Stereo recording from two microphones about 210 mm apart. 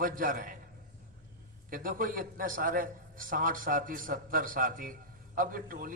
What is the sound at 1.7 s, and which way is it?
A man's voice, 40° right (ahead or behind).